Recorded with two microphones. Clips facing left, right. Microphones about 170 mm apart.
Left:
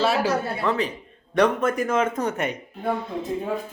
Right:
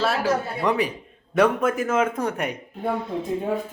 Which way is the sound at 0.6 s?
15° right (ahead or behind).